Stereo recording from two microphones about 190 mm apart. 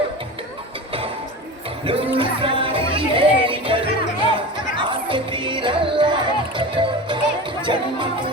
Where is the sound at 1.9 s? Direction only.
30° right (ahead or behind).